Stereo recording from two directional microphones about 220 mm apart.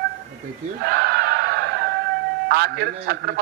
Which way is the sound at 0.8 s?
50° right (ahead or behind).